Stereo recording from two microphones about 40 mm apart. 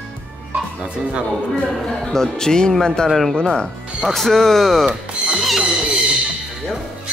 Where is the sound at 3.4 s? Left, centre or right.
Centre.